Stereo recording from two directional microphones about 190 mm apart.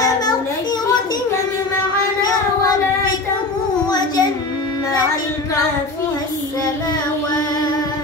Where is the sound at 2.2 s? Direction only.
20° left (ahead or behind).